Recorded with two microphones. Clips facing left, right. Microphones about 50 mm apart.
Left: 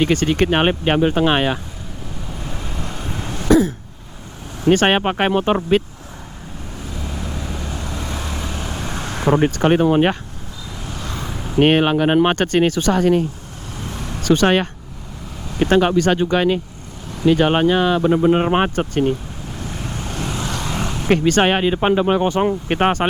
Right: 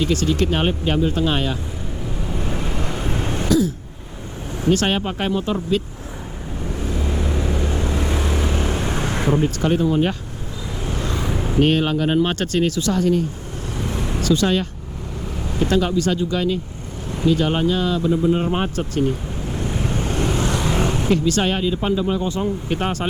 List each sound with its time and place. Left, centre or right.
0.0 s speech: left
2.3 s vehicle: right
3.2 s throat clearing: right
4.6 s speech: left
6.9 s vehicle: right
9.4 s speech: left
10.8 s vehicle: right
11.1 s vehicle: centre
11.6 s speech: left
13.8 s vehicle: centre
14.3 s speech: left
19.5 s vehicle: centre
19.9 s vehicle: centre
21.1 s speech: left